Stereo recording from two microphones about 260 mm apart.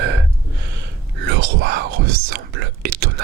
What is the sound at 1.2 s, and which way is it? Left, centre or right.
Whispering, right.